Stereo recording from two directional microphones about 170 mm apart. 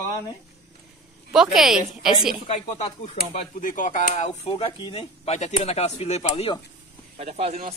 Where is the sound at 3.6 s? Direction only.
50° left (ahead or behind).